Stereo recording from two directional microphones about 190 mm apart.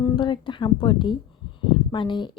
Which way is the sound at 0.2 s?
25° left (ahead or behind).